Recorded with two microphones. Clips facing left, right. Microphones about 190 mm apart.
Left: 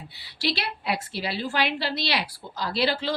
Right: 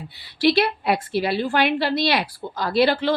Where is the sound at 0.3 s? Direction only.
55° right (ahead or behind).